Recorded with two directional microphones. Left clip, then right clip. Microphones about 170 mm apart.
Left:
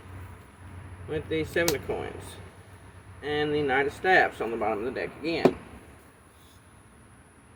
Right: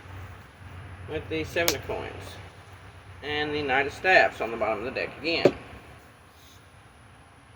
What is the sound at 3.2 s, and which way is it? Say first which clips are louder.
Speech: left 1 dB; 40° left (ahead or behind).